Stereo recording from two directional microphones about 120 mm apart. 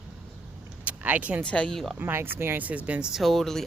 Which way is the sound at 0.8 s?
15° right (ahead or behind).